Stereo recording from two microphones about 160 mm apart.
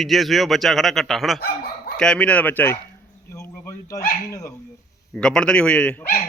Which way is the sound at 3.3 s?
15° left (ahead or behind).